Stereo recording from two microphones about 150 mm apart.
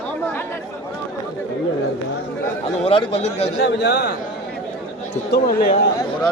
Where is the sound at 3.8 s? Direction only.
90° left.